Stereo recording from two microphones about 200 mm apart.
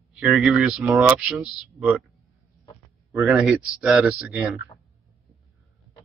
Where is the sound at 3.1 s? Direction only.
5° right (ahead or behind).